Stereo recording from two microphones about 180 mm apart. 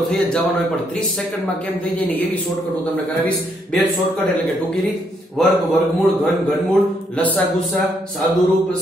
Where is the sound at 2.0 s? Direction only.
10° left (ahead or behind).